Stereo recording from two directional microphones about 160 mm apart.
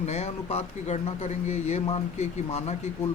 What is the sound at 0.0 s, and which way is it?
Speech, 40° left (ahead or behind).